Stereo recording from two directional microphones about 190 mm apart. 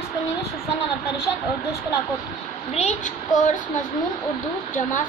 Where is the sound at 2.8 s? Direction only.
40° left (ahead or behind).